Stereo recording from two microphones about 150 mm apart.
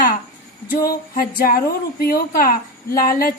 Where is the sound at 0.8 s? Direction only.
75° left (ahead or behind).